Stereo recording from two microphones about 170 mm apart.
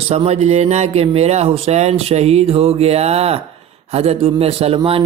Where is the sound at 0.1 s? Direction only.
35° right (ahead or behind).